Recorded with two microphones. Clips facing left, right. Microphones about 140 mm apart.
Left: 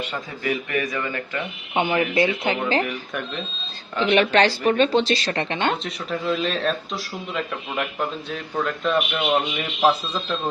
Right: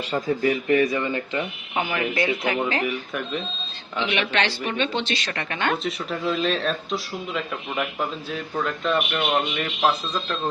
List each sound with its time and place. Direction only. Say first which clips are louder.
0.0 s speech: right 6 dB; 35° right (ahead or behind)
1.7 s speech: left 5 dB; 25° left (ahead or behind)
2.8 s speech: right 2 dB; 5° right (ahead or behind)
3.9 s a woman's voice: left 6 dB; 40° left (ahead or behind)
5.8 s speech: even; centre (ahead or behind)